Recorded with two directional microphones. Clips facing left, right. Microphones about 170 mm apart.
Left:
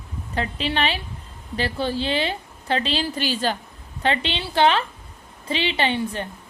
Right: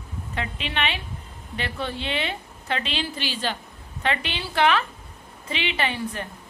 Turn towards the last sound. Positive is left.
turn(degrees=30)  # may be behind; listen again after turning